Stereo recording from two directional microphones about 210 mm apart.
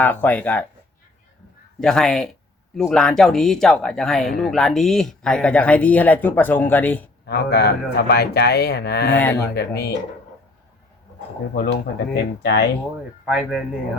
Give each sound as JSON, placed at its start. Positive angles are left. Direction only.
{"t": 0.0, "sound": "speech", "side_deg": 10}
{"t": 1.8, "sound": "speech", "side_deg": 0}
{"t": 7.3, "sound": "speech", "side_deg": 50}
{"t": 9.1, "sound": "speech", "side_deg": 10}
{"t": 9.6, "sound": "speech", "side_deg": 50}
{"t": 11.5, "sound": "speech", "side_deg": 50}
{"t": 13.2, "sound": "speech", "side_deg": -5}